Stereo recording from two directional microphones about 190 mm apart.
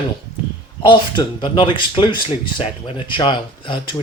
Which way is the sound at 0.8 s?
25° left (ahead or behind).